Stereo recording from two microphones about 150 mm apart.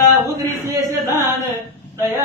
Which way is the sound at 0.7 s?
20° right (ahead or behind).